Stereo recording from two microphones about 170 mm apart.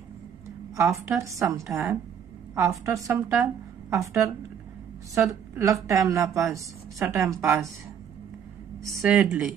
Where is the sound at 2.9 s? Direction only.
20° right (ahead or behind).